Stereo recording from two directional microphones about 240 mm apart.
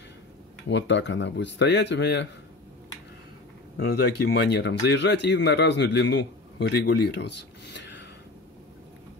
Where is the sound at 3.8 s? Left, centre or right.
Left.